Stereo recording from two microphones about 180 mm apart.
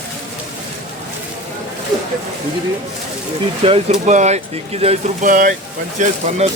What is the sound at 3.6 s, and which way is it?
Speech, 35° right (ahead or behind).